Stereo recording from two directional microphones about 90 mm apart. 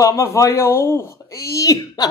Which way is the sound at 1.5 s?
40° left (ahead or behind).